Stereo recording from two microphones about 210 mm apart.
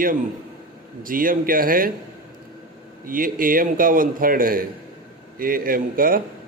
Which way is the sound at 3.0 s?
40° right (ahead or behind).